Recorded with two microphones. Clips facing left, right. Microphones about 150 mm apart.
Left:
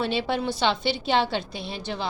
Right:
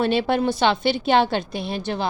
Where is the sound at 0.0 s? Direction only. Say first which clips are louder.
Right 6 dB; 55° right (ahead or behind).